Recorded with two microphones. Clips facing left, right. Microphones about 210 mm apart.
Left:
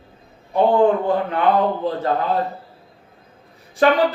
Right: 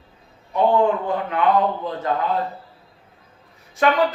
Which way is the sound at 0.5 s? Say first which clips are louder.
Left 3 dB; 30° left (ahead or behind).